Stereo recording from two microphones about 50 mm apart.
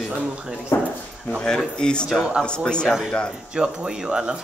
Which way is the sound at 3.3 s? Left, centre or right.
Centre.